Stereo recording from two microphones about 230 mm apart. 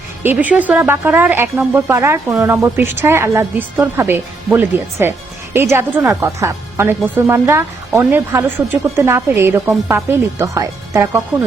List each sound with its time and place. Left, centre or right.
0.2 s speech: centre